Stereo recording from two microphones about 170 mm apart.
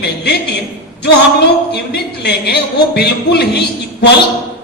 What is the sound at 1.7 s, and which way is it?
A man's voice, 70° left (ahead or behind).